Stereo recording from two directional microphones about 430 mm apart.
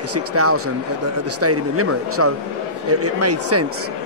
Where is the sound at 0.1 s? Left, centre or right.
Right.